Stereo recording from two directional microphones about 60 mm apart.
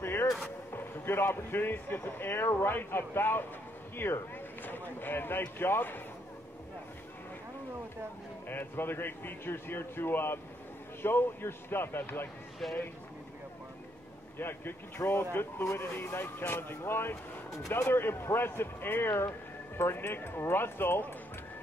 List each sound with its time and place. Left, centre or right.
0.0 s a sound: left
0.7 s speech: left
8.5 s speech: left
14.4 s speech: left